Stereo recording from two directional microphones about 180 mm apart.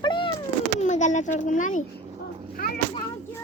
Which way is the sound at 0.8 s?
40° left (ahead or behind).